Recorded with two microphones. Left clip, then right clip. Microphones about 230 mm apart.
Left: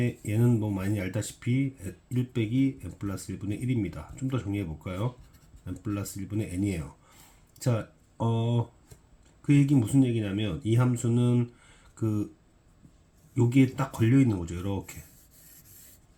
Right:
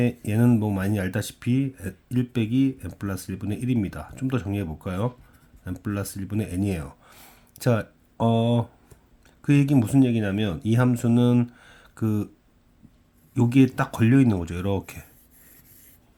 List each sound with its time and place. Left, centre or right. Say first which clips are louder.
0.3 s speech: right 4 dB; right
13.3 s speech: right 4 dB; right